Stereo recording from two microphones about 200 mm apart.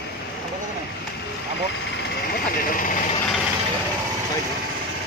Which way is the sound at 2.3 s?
45° left (ahead or behind).